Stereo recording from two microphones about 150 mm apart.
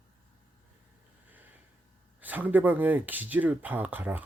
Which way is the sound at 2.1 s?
10° right (ahead or behind).